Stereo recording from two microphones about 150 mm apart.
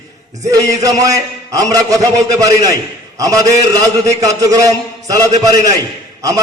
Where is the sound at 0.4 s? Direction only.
20° right (ahead or behind).